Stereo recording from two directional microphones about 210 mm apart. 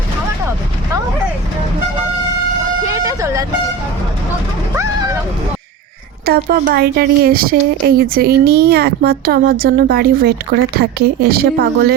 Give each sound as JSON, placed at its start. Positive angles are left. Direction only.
{"t": 2.8, "sound": "vehicle", "side_deg": -15}
{"t": 4.7, "sound": "vehicle", "side_deg": -15}
{"t": 6.2, "sound": "speech", "side_deg": -45}